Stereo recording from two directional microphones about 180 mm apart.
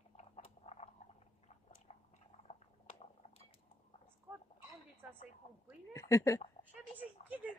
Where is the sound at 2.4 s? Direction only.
35° left (ahead or behind).